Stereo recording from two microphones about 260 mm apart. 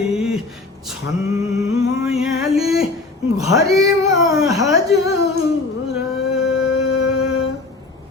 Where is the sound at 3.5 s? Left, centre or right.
Centre.